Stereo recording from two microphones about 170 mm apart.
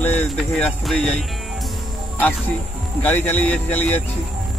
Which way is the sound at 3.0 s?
10° left (ahead or behind).